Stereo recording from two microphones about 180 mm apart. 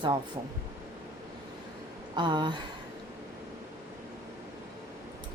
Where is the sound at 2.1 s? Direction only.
25° right (ahead or behind).